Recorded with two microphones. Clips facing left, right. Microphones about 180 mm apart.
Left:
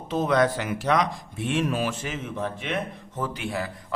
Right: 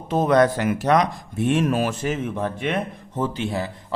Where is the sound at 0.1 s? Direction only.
50° right (ahead or behind).